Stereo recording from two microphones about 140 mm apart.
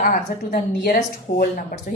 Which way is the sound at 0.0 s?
85° left.